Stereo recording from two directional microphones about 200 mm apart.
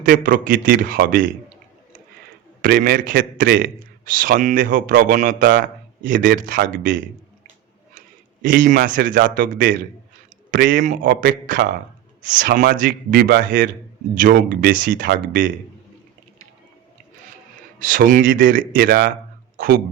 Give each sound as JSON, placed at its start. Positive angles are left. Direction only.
{"t": 0.0, "sound": "a man's voice", "side_deg": -45}
{"t": 2.6, "sound": "a man's voice", "side_deg": -45}
{"t": 8.4, "sound": "a man's voice", "side_deg": -45}
{"t": 17.7, "sound": "a man's voice", "side_deg": -45}